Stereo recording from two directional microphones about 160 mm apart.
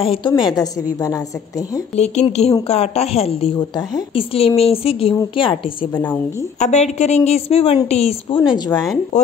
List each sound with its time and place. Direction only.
0.0 s a woman's voice: 35° left (ahead or behind)
2.0 s a woman's voice: 45° left (ahead or behind)
6.6 s a woman's voice: 45° left (ahead or behind)